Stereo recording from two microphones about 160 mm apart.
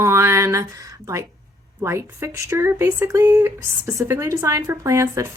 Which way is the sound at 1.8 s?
15° right (ahead or behind).